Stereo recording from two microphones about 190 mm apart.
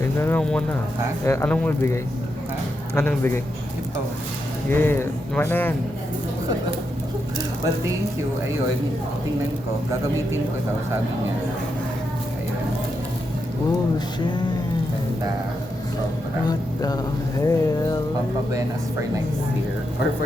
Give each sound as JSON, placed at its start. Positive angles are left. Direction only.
{"t": 0.2, "sound": "speech", "side_deg": 10}
{"t": 4.7, "sound": "speech", "side_deg": 10}
{"t": 16.5, "sound": "speech", "side_deg": 20}